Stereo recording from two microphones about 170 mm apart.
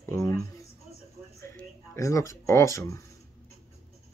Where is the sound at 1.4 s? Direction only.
15° left (ahead or behind).